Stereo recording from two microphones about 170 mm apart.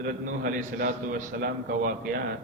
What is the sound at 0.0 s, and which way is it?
A man's voice, 55° right (ahead or behind).